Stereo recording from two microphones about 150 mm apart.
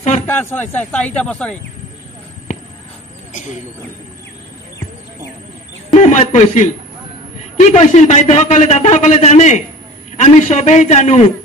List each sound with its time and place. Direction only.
0.3 s speech: 15° left (ahead or behind)
5.9 s a man's voice: 50° left (ahead or behind)